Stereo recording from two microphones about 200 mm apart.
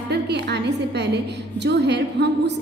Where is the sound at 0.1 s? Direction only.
55° right (ahead or behind).